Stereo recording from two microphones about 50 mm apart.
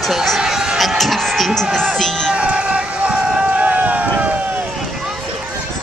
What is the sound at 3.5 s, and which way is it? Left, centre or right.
Run, right.